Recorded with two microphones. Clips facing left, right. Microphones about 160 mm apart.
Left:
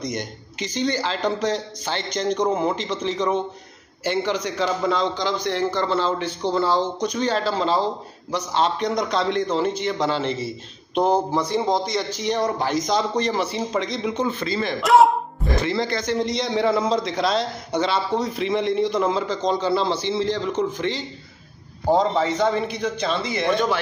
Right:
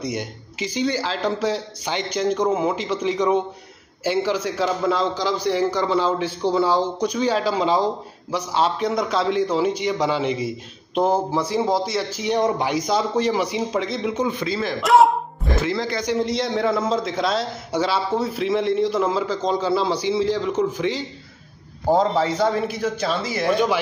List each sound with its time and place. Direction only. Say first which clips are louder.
0.0 s a man's voice: right 1 dB; 10° right (ahead or behind)
12.4 s a man's voice: right 3 dB; 20° right (ahead or behind)